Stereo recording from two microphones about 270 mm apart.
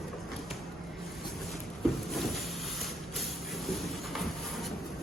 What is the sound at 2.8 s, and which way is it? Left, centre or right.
Music, centre.